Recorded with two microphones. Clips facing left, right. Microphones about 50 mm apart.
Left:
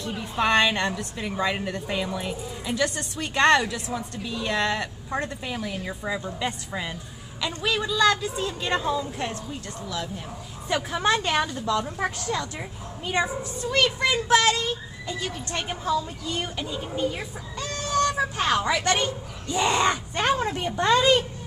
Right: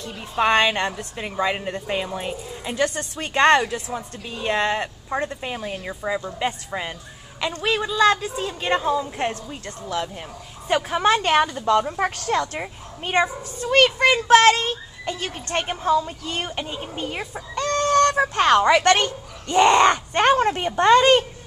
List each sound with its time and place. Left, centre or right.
0.4 s a woman's voice: right
9.2 s a woman's voice: right
12.3 s a child's voice: right